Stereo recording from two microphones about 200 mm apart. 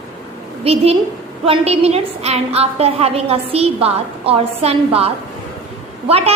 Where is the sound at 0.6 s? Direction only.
30° right (ahead or behind).